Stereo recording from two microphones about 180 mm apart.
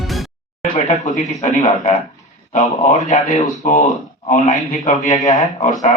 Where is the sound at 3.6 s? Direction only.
45° left (ahead or behind).